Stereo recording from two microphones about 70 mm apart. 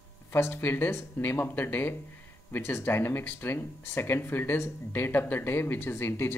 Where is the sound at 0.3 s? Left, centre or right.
Left.